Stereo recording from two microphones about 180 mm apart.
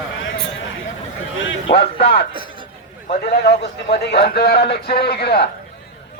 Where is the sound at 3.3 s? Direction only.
65° left (ahead or behind).